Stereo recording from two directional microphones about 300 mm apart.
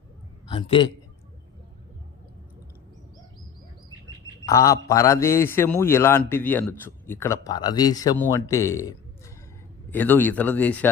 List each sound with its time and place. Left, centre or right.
0.5 s a man's voice: centre
4.4 s a man's voice: centre